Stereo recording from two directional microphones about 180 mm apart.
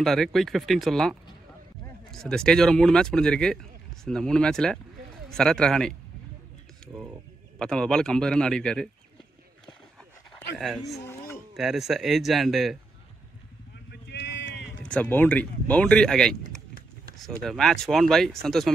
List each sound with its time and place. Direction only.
0.0 s speech: centre (ahead or behind)
6.9 s speech: 10° right (ahead or behind)
7.5 s speech: 5° left (ahead or behind)
11.0 s a sound: 15° left (ahead or behind)
11.5 s speech: centre (ahead or behind)
14.0 s vehicle: 75° left (ahead or behind)
14.9 s speech: 10° left (ahead or behind)